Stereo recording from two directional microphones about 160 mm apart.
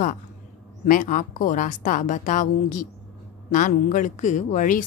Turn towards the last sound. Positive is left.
turn(degrees=55)  # may be behind; listen again after turning